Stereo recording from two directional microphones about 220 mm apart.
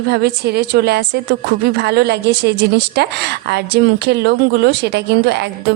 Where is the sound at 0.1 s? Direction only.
50° right (ahead or behind).